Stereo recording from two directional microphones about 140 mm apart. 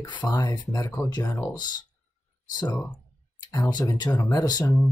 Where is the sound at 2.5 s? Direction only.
30° left (ahead or behind).